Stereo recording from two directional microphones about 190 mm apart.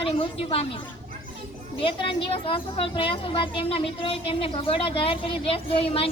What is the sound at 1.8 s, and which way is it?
A woman's voice, 30° left (ahead or behind).